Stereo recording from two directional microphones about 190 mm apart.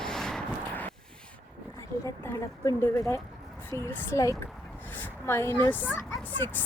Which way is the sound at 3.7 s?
15° left (ahead or behind).